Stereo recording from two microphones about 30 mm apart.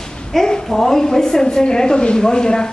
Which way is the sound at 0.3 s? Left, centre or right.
Centre.